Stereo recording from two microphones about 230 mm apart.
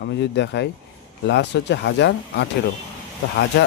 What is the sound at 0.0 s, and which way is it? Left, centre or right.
Speech, left.